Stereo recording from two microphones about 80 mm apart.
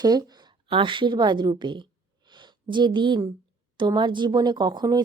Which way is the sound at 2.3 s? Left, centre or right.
Right.